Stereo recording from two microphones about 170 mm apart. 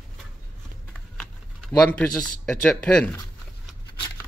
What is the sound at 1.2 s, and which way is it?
Speech, 5° left (ahead or behind).